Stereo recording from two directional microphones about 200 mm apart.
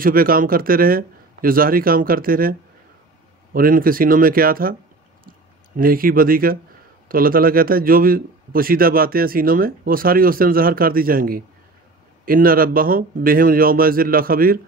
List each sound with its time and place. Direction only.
0.0 s a man's voice: 45° right (ahead or behind)
3.5 s a man's voice: 45° right (ahead or behind)
5.8 s a man's voice: 45° right (ahead or behind)